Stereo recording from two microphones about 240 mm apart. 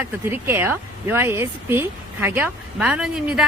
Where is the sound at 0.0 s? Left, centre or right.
Centre.